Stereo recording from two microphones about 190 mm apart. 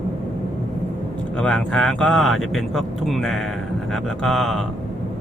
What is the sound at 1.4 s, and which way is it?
Speech, 5° left (ahead or behind).